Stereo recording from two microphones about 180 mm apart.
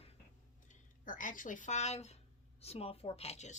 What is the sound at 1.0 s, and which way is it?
Speech, 50° left (ahead or behind).